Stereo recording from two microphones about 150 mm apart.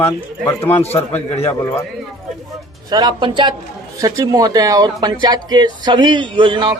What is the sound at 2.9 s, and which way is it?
A man's voice, 30° right (ahead or behind).